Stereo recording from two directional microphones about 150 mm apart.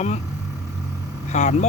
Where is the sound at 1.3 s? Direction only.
55° left (ahead or behind).